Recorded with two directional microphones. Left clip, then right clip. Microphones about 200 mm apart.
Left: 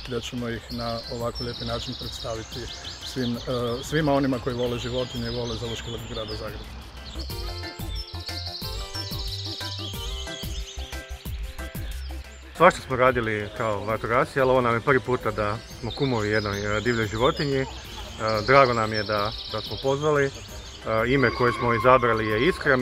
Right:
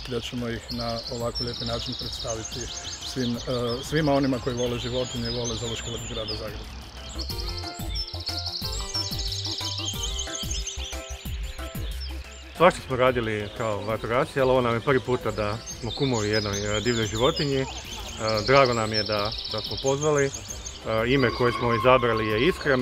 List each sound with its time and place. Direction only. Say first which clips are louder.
0.1 s speech: even; 5° right (ahead or behind)
3.4 s speech: left 1 dB; 5° right (ahead or behind)
12.5 s speech: left 2 dB; 5° right (ahead or behind)